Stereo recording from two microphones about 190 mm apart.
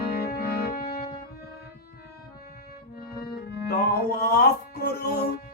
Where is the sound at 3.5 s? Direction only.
60° left (ahead or behind).